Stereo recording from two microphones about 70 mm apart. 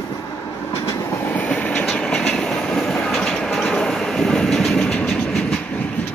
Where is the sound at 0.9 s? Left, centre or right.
Left.